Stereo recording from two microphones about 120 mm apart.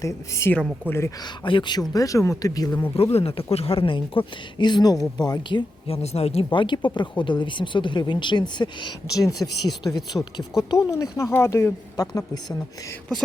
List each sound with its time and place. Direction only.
0.0 s speech: 25° left (ahead or behind)
1.2 s speech: 40° left (ahead or behind)
1.9 s speech: 30° left (ahead or behind)
2.9 s speech: 60° left (ahead or behind); by 6.0 s 40° left (ahead or behind)
6.0 s speech: 60° left (ahead or behind)
6.5 s speech: 40° left (ahead or behind)